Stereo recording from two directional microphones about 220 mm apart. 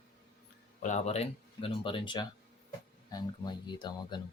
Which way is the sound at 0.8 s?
35° left (ahead or behind).